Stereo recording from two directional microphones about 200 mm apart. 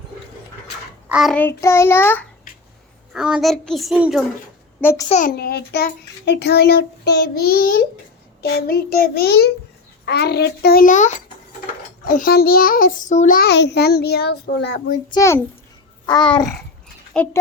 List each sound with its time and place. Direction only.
1.0 s child singing: 5° right (ahead or behind)
3.1 s a child's voice: 5° right (ahead or behind)
4.8 s child singing: 10° left (ahead or behind)
5.0 s a child's voice: 35° left (ahead or behind)
5.4 s a child's voice: 55° left (ahead or behind)
15.1 s child singing: 15° left (ahead or behind)
16.0 s babbling: 20° left (ahead or behind)
17.2 s a child's voice: 5° left (ahead or behind)